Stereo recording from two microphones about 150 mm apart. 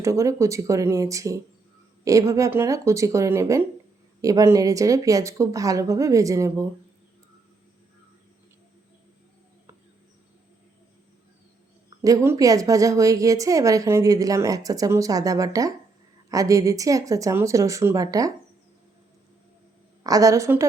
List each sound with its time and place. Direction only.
0.0 s a woman's voice: 20° right (ahead or behind)
12.0 s a woman's voice: 20° right (ahead or behind)
20.1 s a woman's voice: 25° right (ahead or behind)